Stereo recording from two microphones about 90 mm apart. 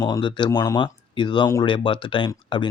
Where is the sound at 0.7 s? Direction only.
60° left (ahead or behind).